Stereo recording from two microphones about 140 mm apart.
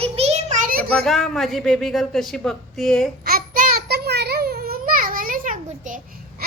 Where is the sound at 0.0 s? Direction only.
50° right (ahead or behind).